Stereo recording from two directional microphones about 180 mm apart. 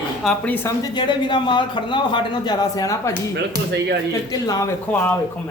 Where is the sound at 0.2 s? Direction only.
5° left (ahead or behind).